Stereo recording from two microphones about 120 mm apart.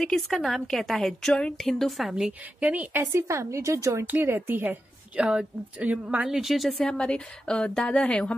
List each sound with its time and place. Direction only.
0.0 s a woman's voice: centre (ahead or behind)